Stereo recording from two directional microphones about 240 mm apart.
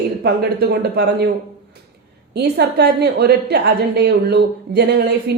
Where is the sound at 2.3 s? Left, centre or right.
Right.